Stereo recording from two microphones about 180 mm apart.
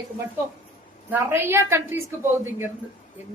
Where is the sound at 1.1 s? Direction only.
15° right (ahead or behind).